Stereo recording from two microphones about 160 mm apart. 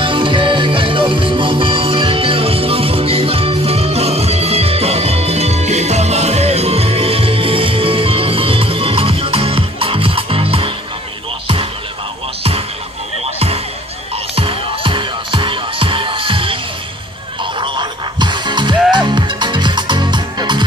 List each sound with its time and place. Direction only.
0.0 s music: 30° right (ahead or behind)
13.2 s music: 40° right (ahead or behind)